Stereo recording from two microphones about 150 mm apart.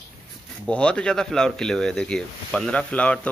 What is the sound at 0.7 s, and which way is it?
Speech, 10° left (ahead or behind).